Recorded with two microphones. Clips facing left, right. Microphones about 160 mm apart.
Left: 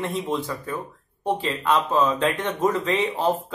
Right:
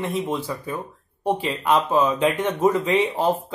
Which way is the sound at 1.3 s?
15° right (ahead or behind).